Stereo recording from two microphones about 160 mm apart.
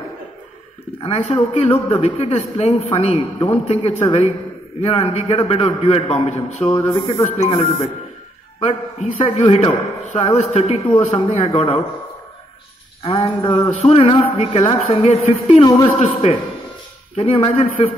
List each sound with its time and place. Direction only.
1.0 s a man's voice: 40° left (ahead or behind)
13.0 s a man's voice: 35° left (ahead or behind)